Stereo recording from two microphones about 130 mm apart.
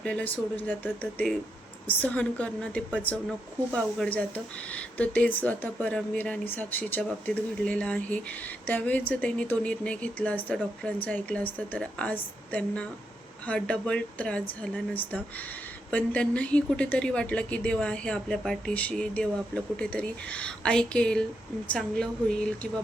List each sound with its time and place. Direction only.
0.0 s a woman's voice: 10° left (ahead or behind)
1.9 s a woman's voice: 10° left (ahead or behind)
3.8 s speech: centre (ahead or behind)
4.7 s a woman's voice: 10° left (ahead or behind)